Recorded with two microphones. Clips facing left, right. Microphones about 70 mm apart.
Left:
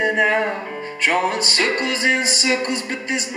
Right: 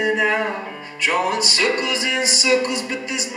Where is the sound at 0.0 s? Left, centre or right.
Left.